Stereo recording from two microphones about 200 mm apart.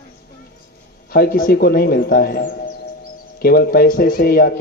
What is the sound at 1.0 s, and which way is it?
Speech, 50° left (ahead or behind).